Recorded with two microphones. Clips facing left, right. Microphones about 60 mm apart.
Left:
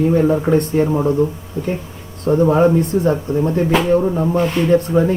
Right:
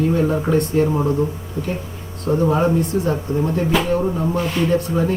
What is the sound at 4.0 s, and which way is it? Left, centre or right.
Speech, centre.